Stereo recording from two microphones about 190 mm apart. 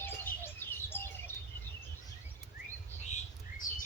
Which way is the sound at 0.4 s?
10° left (ahead or behind).